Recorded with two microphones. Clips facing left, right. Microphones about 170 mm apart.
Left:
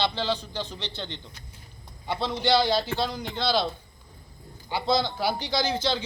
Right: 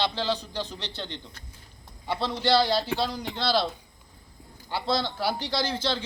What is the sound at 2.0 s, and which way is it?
A man's voice, 5° right (ahead or behind).